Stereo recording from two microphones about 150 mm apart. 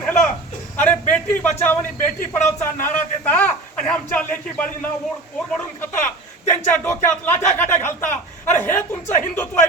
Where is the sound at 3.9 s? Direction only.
10° left (ahead or behind).